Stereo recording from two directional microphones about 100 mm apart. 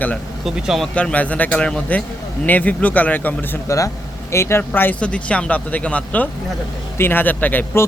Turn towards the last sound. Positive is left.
turn(degrees=20)  # may be behind; listen again after turning